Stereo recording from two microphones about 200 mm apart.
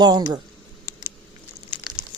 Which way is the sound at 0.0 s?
20° right (ahead or behind).